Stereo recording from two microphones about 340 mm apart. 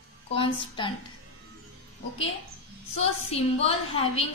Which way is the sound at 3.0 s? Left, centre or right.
Centre.